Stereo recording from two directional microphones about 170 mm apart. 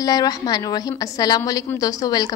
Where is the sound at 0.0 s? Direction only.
20° left (ahead or behind).